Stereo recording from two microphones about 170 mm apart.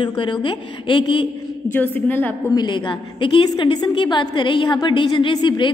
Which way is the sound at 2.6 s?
30° left (ahead or behind).